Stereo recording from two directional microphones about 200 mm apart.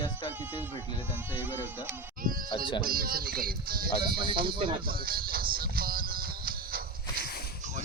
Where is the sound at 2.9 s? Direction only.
45° right (ahead or behind).